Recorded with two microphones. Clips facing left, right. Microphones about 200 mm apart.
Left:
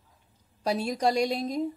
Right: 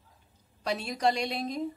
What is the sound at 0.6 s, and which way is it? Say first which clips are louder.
A woman's voice: left 3 dB; 40° left (ahead or behind).